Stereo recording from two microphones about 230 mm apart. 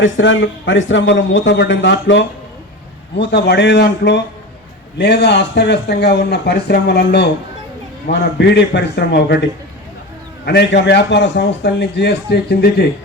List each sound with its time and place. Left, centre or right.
0.0 s a man's voice: left
10.4 s a man's voice: left